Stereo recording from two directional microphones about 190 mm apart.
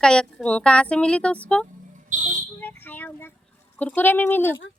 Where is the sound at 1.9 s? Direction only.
40° right (ahead or behind).